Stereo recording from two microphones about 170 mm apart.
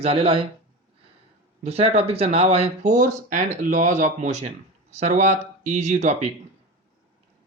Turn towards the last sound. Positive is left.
turn(degrees=-45)  # may be behind; listen again after turning